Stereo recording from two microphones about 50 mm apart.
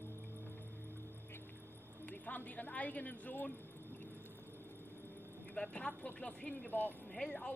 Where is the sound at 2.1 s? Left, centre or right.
Left.